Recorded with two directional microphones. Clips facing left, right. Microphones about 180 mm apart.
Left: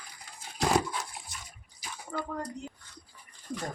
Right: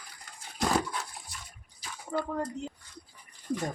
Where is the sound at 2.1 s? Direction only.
25° right (ahead or behind).